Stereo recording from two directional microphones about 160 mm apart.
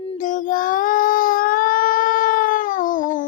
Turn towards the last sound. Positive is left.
turn(degrees=55)  # may be behind; listen again after turning